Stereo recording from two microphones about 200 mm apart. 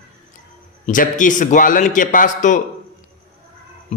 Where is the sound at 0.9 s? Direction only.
40° left (ahead or behind).